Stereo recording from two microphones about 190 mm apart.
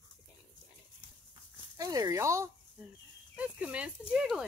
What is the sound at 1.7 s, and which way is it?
Speech, 20° right (ahead or behind).